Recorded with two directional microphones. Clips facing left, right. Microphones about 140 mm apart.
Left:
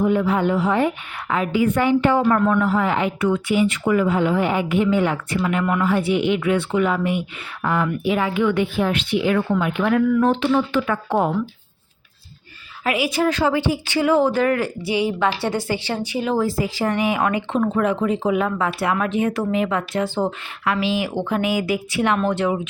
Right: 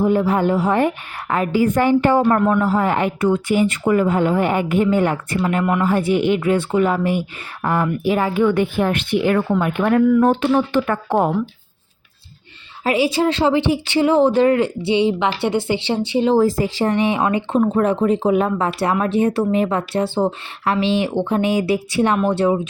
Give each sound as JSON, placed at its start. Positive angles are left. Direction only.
{"t": 0.0, "sound": "a woman's voice", "side_deg": -35}
{"t": 12.8, "sound": "a woman's voice", "side_deg": -30}
{"t": 17.6, "sound": "speech", "side_deg": -35}